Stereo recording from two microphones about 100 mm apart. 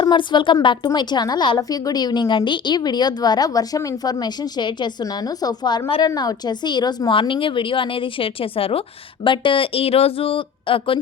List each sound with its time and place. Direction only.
0.0 s a woman's voice: 50° left (ahead or behind)
7.2 s speech: 60° left (ahead or behind)
9.2 s speech: 55° left (ahead or behind)